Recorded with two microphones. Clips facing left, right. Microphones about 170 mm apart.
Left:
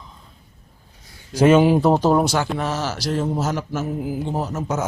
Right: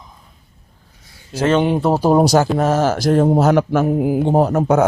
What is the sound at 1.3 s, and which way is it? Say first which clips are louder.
Speech: left 2 dB; 10° left (ahead or behind).